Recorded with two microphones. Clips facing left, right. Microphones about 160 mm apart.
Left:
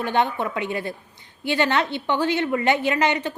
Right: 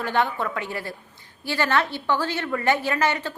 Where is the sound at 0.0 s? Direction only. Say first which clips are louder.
Left 2 dB; 20° left (ahead or behind).